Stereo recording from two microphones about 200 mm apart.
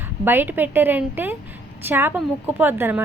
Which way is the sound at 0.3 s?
10° right (ahead or behind).